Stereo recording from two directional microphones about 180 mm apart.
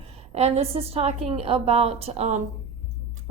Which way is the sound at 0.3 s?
35° right (ahead or behind).